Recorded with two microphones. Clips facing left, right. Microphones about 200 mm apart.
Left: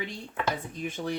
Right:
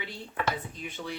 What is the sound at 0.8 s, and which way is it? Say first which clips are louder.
Speech: left 5 dB; 45° left (ahead or behind).